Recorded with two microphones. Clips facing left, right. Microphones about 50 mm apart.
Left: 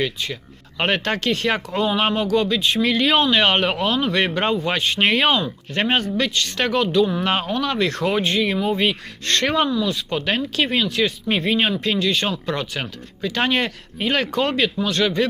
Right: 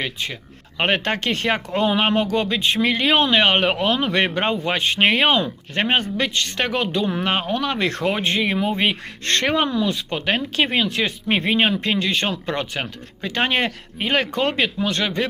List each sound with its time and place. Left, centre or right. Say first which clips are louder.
0.8 s speech: even; centre
1.5 s speech: right 3 dB; centre
2.5 s speech: even; right